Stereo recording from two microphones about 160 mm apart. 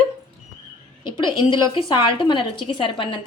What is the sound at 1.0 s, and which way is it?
A woman's voice, 30° left (ahead or behind).